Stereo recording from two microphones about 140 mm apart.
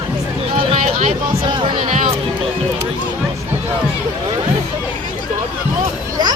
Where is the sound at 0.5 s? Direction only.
45° right (ahead or behind).